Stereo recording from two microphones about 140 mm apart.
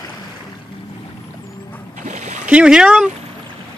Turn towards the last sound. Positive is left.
turn(degrees=-5)  # may be behind; listen again after turning